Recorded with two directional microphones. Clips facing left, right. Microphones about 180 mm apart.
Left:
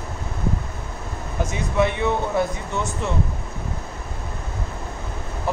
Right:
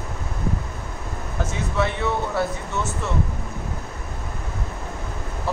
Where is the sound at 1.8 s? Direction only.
15° left (ahead or behind).